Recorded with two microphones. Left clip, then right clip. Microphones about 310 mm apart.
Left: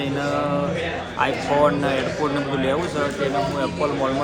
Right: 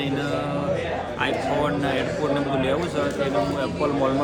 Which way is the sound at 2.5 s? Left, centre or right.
Centre.